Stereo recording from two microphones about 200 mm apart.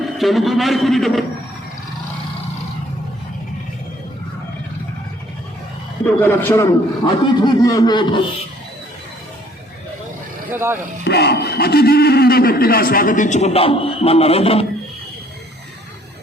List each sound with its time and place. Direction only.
0.2 s a man's voice: centre (ahead or behind)
6.1 s a man's voice: 10° left (ahead or behind)
10.5 s speech: 10° right (ahead or behind)
11.0 s speech: 55° left (ahead or behind); by 14.7 s 30° left (ahead or behind)